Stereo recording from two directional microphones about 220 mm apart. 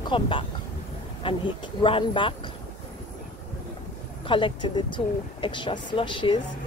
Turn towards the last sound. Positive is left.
turn(degrees=20)  # may be behind; listen again after turning